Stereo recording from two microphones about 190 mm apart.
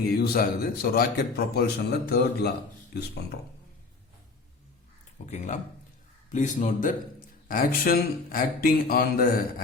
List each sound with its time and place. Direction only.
0.1 s a man's voice: 55° left (ahead or behind)
5.3 s a man's voice: 40° left (ahead or behind)